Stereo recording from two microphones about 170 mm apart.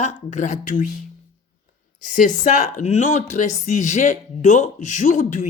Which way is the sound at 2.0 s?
50° left (ahead or behind).